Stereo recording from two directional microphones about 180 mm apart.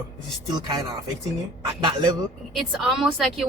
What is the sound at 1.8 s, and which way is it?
Speech, 25° right (ahead or behind).